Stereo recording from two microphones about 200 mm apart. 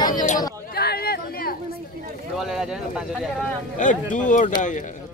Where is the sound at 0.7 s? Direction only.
50° left (ahead or behind).